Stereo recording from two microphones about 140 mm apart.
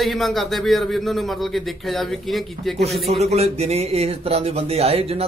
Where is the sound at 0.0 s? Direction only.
Centre (ahead or behind).